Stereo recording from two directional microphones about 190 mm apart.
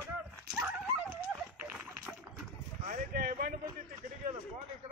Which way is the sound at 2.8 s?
50° right (ahead or behind).